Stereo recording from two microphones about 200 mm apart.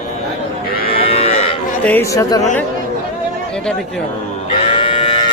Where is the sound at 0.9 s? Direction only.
30° left (ahead or behind).